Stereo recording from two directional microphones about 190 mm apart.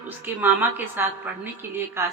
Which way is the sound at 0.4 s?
10° right (ahead or behind).